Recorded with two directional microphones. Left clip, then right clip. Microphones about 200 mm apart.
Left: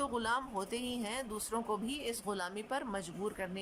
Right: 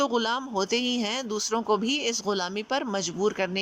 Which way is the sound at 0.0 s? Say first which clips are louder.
Right 9 dB; 15° right (ahead or behind).